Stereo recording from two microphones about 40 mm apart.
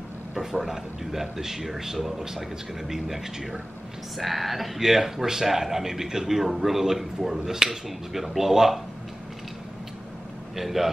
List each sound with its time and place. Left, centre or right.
0.3 s a man's voice: centre
10.5 s a man's voice: centre